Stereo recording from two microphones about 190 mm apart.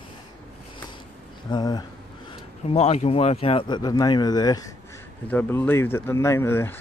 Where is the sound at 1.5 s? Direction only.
20° left (ahead or behind).